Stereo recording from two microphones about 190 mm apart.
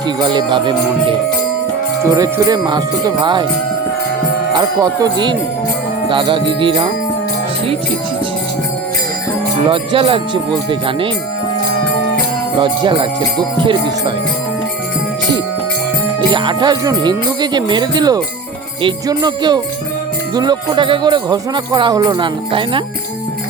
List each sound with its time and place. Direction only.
0.2 s jingle bell: 25° right (ahead or behind)
2.0 s jingle bell: 20° right (ahead or behind)
4.5 s jingle bell: 20° right (ahead or behind)
9.6 s jingle bell: 25° right (ahead or behind)
12.5 s jingle bell: 25° right (ahead or behind)
16.3 s jingle bell: 25° right (ahead or behind)